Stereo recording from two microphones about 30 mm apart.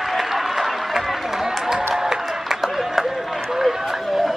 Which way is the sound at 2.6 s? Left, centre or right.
Centre.